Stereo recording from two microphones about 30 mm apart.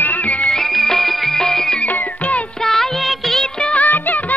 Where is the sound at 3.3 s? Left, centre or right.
Left.